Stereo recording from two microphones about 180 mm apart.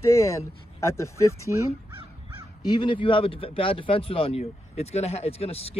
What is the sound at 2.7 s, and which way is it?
Speech, 25° left (ahead or behind).